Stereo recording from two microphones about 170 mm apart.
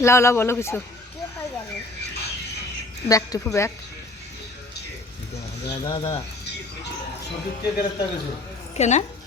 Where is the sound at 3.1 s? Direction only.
20° left (ahead or behind).